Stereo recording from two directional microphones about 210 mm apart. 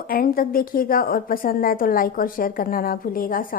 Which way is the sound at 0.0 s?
45° left (ahead or behind).